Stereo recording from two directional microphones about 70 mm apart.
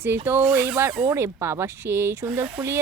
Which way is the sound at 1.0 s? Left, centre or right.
Right.